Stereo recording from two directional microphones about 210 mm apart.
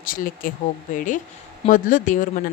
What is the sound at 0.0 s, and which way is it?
Speech, 40° left (ahead or behind).